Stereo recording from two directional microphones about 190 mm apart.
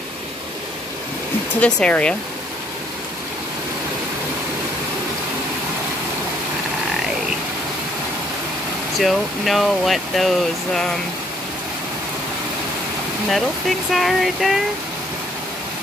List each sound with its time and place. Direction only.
1.6 s speech: 5° left (ahead or behind)
8.9 s speech: centre (ahead or behind)
13.9 s speech: centre (ahead or behind)